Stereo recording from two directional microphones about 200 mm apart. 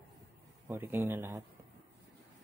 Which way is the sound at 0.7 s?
10° right (ahead or behind).